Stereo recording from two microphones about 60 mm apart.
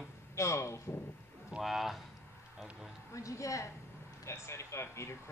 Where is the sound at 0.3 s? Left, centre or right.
Left.